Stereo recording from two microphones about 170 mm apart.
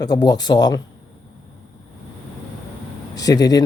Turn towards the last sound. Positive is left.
turn(degrees=20)  # may be behind; listen again after turning